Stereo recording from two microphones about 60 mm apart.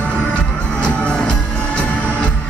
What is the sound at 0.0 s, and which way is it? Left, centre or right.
Music, left.